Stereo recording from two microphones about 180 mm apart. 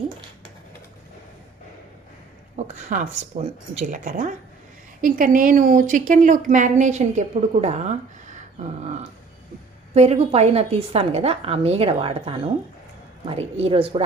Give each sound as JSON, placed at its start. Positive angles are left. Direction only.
{"t": 2.6, "sound": "a woman's voice", "side_deg": -45}